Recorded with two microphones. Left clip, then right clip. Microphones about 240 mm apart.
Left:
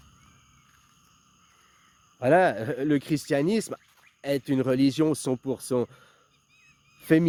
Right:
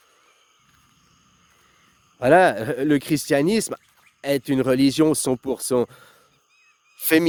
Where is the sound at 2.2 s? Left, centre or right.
Right.